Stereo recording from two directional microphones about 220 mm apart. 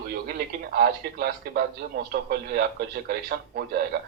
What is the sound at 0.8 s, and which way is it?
A man's voice, 45° right (ahead or behind).